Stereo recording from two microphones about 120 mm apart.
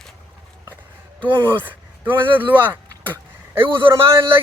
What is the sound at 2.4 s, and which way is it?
Speech, 15° right (ahead or behind).